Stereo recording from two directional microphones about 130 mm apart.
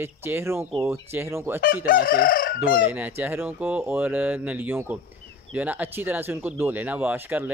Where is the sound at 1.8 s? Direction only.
90° left.